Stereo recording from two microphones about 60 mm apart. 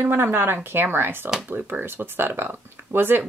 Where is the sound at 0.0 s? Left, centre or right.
Right.